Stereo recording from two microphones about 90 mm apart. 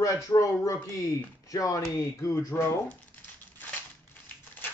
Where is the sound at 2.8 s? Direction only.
20° left (ahead or behind).